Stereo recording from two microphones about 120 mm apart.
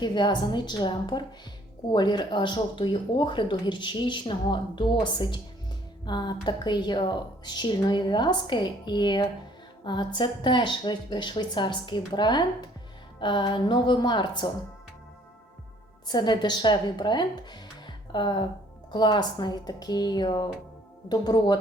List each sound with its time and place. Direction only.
0.0 s speech: 40° left (ahead or behind)
16.0 s speech: 35° left (ahead or behind)